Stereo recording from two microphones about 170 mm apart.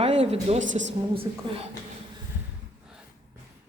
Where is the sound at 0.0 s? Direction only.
40° right (ahead or behind).